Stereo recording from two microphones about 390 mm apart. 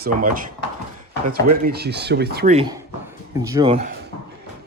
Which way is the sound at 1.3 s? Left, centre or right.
Right.